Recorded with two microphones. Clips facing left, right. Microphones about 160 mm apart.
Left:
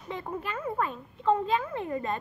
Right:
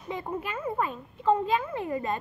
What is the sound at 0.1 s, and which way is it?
A child's voice, 10° right (ahead or behind).